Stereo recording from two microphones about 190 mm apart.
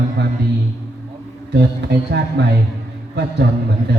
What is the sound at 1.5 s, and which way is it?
Speech, 60° right (ahead or behind).